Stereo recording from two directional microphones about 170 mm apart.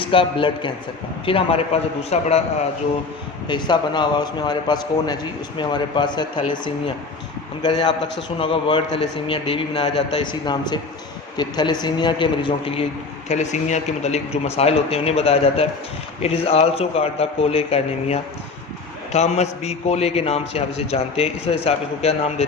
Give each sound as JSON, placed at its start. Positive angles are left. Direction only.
{"t": 0.0, "sound": "a man's voice", "side_deg": 30}
{"t": 3.5, "sound": "a man's voice", "side_deg": 25}
{"t": 7.6, "sound": "a man's voice", "side_deg": 25}